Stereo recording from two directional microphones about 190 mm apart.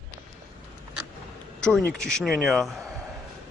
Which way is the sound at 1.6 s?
5° left (ahead or behind).